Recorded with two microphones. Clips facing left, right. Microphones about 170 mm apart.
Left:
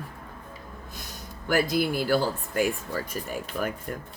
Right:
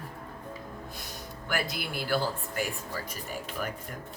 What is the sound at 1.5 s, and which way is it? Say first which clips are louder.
Speech: left 9 dB; 40° left (ahead or behind).